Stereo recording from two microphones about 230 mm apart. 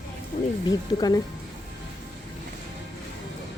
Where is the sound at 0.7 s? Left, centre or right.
Centre.